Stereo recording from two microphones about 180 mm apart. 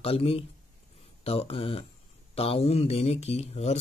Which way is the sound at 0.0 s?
30° left (ahead or behind).